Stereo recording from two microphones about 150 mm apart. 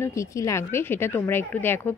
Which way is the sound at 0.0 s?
20° left (ahead or behind).